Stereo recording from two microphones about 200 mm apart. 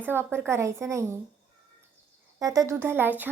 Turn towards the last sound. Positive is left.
turn(degrees=-10)  # may be behind; listen again after turning